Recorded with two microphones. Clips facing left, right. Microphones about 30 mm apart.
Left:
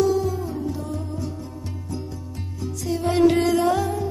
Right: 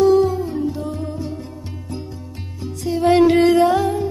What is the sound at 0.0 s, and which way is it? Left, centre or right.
Music, right.